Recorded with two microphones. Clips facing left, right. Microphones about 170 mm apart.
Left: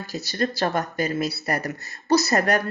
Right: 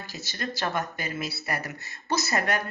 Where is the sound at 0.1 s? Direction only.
35° left (ahead or behind).